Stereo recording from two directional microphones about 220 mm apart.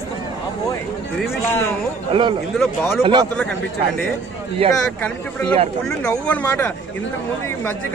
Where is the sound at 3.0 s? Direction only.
20° right (ahead or behind).